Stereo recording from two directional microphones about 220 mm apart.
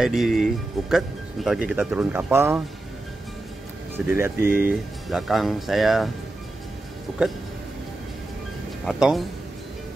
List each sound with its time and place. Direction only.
0.0 s speech: centre (ahead or behind)
3.9 s speech: 10° right (ahead or behind)
8.8 s speech: centre (ahead or behind)